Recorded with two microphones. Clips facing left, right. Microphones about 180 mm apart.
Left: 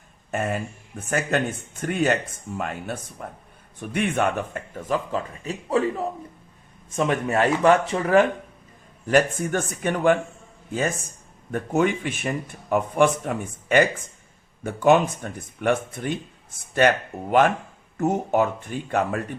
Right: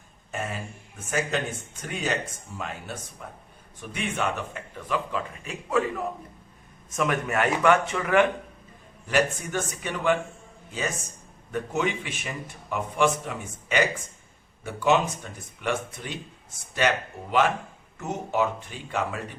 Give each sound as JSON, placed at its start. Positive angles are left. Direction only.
{"t": 0.3, "sound": "speech", "side_deg": 55}
{"t": 9.0, "sound": "a man's voice", "side_deg": 50}